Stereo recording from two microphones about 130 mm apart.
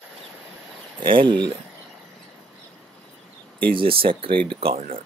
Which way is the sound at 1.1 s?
35° right (ahead or behind).